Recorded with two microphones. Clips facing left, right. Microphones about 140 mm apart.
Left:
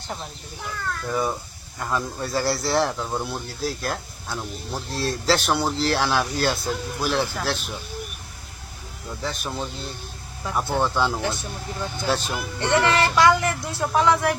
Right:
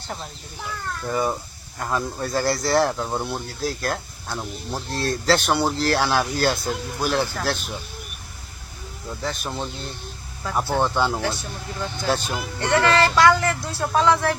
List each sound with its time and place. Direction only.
1.0 s speech: centre (ahead or behind)
9.2 s speech: centre (ahead or behind)
11.1 s speech: 20° left (ahead or behind)
12.1 s speech: centre (ahead or behind)
12.5 s speech: 20° left (ahead or behind)